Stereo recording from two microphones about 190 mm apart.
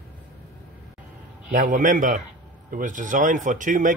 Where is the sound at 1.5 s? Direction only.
45° right (ahead or behind).